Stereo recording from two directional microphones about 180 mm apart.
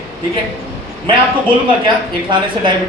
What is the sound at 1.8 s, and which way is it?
Speech, 25° right (ahead or behind).